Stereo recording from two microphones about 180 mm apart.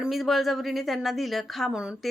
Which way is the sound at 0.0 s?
Centre (ahead or behind).